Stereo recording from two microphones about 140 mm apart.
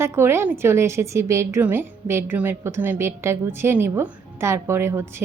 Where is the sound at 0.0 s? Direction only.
20° right (ahead or behind).